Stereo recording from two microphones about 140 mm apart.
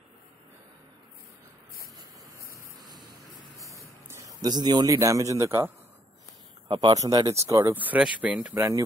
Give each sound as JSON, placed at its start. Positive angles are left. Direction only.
{"t": 2.5, "sound": "a sound", "side_deg": -30}
{"t": 6.7, "sound": "speech", "side_deg": -30}
{"t": 7.7, "sound": "speech", "side_deg": -10}